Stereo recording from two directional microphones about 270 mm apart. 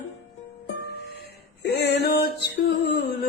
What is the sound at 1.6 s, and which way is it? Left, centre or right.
Male singing, left.